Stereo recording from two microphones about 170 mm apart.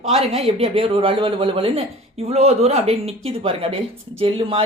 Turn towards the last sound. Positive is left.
turn(degrees=-30)  # may be behind; listen again after turning